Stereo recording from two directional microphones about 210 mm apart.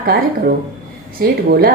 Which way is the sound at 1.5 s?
45° right (ahead or behind).